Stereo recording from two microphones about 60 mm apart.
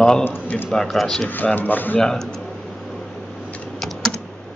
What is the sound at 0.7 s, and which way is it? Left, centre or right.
Speech, centre.